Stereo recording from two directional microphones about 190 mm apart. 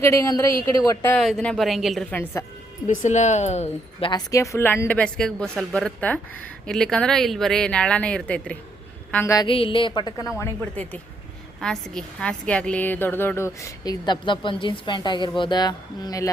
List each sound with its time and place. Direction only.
0.0 s a woman's voice: 15° left (ahead or behind)
1.2 s a woman's voice: 5° left (ahead or behind)
2.8 s a woman's voice: 40° left (ahead or behind)
4.1 s a woman's voice: 15° left (ahead or behind)
9.5 s speech: 30° left (ahead or behind)
10.3 s a woman's voice: 10° left (ahead or behind)